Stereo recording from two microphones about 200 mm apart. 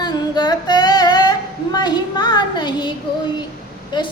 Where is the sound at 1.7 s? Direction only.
20° left (ahead or behind).